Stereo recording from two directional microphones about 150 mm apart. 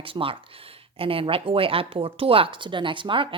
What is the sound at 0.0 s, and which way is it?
Speech, 35° right (ahead or behind).